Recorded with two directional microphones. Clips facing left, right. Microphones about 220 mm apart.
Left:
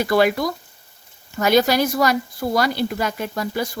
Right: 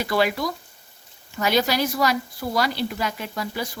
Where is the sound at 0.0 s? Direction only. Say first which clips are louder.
Left 5 dB; 50° left (ahead or behind).